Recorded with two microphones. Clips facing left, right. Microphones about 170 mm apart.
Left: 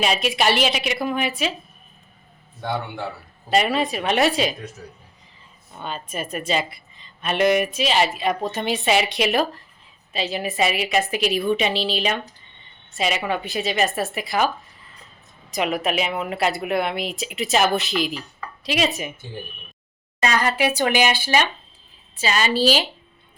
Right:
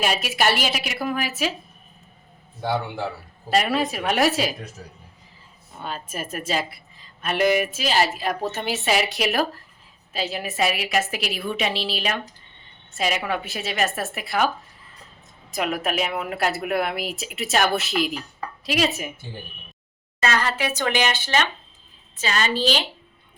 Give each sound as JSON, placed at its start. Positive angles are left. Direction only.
{"t": 0.0, "sound": "speech", "side_deg": -5}
{"t": 3.6, "sound": "speech", "side_deg": 0}
{"t": 5.8, "sound": "speech", "side_deg": -5}
{"t": 15.5, "sound": "speech", "side_deg": 0}
{"t": 20.2, "sound": "speech", "side_deg": 15}